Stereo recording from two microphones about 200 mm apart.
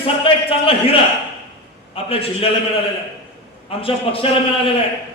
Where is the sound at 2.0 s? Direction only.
30° left (ahead or behind).